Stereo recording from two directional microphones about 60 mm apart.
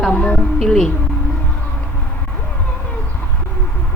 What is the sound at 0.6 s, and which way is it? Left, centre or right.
Speech, centre.